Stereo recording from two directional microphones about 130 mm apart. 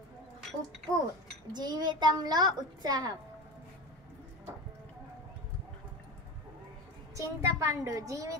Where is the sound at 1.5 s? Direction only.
35° right (ahead or behind).